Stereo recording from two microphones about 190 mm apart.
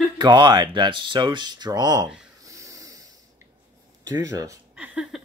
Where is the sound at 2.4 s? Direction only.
15° right (ahead or behind).